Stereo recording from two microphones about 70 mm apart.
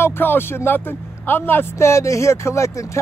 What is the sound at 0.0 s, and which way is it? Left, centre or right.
Speech, left.